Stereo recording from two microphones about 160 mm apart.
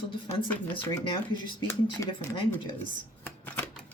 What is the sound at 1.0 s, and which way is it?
Speech, 30° left (ahead or behind).